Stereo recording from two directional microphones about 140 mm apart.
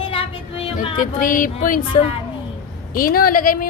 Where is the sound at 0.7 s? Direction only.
75° left (ahead or behind).